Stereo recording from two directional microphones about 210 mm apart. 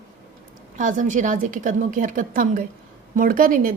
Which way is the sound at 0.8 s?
40° right (ahead or behind).